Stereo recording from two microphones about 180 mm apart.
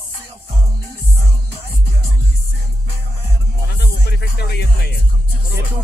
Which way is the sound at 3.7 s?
65° left (ahead or behind).